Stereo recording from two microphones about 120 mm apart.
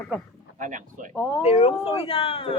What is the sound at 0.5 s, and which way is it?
Speech, 90° right.